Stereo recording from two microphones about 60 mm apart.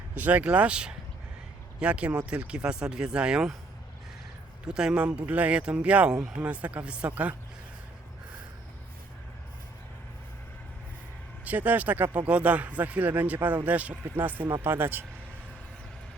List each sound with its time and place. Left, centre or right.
0.1 s a man's voice: right
4.7 s a man's voice: centre
6.1 s speech: centre
6.4 s a man's voice: right
11.4 s a man's voice: right